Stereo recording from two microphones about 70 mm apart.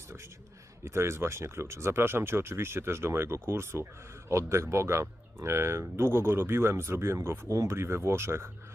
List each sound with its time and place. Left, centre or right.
0.9 s speech: right